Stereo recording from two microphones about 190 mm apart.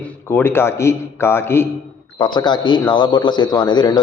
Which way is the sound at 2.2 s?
25° left (ahead or behind).